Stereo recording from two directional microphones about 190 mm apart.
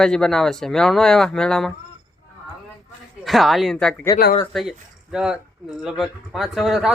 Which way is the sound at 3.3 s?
Centre (ahead or behind).